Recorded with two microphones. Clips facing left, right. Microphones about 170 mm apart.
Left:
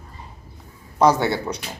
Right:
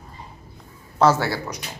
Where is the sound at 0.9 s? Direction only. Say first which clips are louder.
Left 1 dB; 15° left (ahead or behind).